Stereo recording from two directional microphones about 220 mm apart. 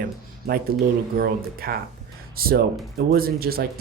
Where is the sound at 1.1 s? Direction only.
45° right (ahead or behind).